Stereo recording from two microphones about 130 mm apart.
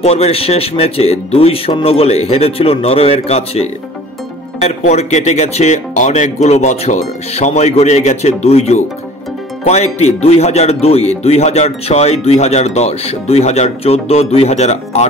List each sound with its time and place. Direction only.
0.0 s speech: 55° left (ahead or behind)